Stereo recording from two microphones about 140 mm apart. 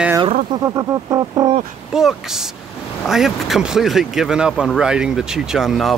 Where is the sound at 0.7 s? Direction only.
25° right (ahead or behind).